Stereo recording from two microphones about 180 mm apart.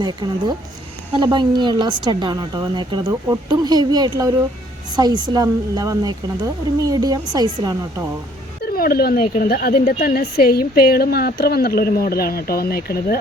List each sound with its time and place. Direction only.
0.0 s speech: 25° right (ahead or behind)
8.6 s a woman's voice: 55° left (ahead or behind)